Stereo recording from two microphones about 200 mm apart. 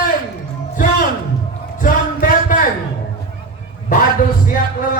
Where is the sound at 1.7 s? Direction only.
45° left (ahead or behind).